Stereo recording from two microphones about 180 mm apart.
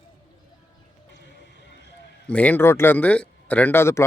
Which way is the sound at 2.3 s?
5° left (ahead or behind).